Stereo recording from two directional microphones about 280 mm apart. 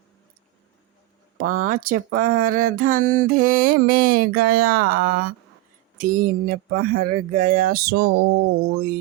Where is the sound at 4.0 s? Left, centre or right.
Right.